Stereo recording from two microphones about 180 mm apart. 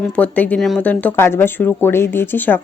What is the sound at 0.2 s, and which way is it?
Speech, 10° left (ahead or behind).